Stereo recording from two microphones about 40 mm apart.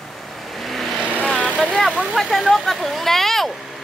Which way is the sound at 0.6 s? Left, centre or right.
Centre.